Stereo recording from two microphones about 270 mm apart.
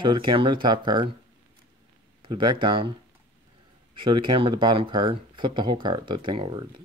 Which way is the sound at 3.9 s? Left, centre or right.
Centre.